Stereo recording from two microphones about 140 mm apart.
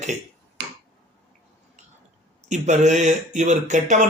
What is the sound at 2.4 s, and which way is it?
Speech, 55° right (ahead or behind).